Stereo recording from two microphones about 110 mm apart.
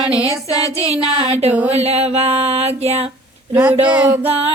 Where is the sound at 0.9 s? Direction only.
65° right (ahead or behind).